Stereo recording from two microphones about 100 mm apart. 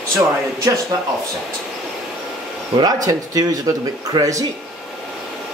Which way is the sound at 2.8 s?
40° right (ahead or behind).